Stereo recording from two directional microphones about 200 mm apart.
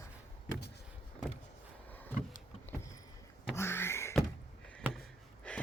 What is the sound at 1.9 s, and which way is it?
Vehicle, 10° left (ahead or behind).